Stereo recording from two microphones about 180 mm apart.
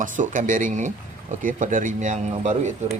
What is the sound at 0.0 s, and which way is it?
Speech, 45° right (ahead or behind).